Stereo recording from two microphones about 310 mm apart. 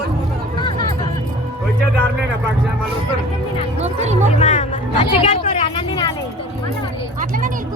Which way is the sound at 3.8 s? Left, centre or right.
Right.